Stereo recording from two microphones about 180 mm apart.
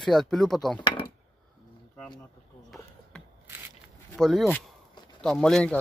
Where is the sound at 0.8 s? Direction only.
30° left (ahead or behind).